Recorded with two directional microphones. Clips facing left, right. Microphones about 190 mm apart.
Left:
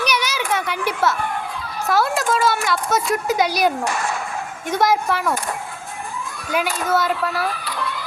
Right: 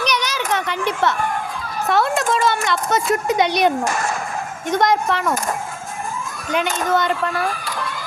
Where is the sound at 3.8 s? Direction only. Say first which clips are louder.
Right 1 dB; 45° right (ahead or behind).